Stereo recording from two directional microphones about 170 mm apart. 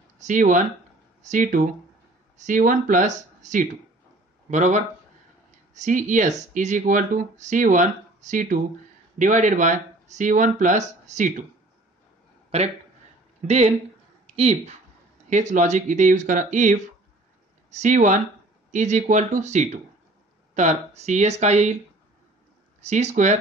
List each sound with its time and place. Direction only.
0.2 s speech: 50° right (ahead or behind)
12.4 s a sound: 40° right (ahead or behind)
13.5 s speech: 40° right (ahead or behind)
22.8 s speech: 40° right (ahead or behind)